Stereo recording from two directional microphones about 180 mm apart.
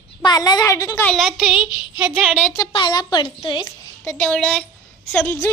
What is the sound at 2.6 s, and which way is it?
A woman's voice, 25° left (ahead or behind).